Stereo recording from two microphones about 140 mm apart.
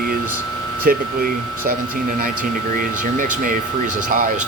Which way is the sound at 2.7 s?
75° right (ahead or behind).